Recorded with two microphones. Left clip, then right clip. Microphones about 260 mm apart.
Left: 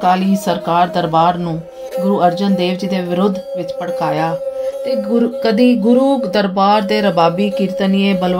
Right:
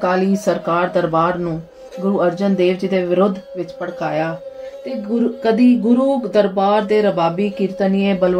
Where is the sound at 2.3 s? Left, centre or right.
Left.